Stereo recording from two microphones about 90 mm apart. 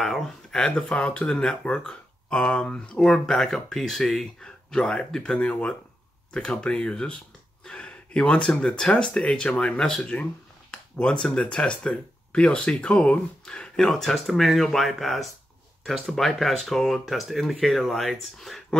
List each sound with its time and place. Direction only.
0.0 s speech: 5° left (ahead or behind)